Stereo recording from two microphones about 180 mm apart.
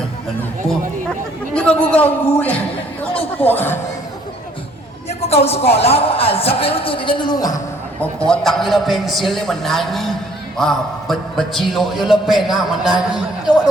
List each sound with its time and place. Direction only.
1.5 s a man's voice: 5° left (ahead or behind)
5.0 s a woman's voice: 35° left (ahead or behind)
8.3 s a man's voice: centre (ahead or behind)